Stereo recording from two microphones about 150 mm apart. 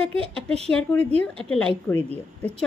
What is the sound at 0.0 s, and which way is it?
Speech, 40° right (ahead or behind).